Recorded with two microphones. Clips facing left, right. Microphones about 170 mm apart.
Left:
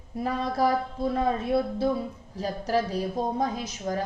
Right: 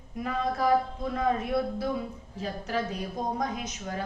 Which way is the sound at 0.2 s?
35° left (ahead or behind).